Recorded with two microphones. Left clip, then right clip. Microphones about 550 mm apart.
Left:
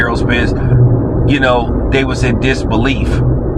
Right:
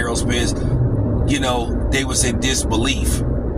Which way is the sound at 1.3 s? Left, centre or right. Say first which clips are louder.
Left 9 dB; right.